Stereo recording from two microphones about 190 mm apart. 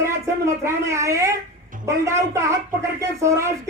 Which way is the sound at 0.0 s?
15° right (ahead or behind).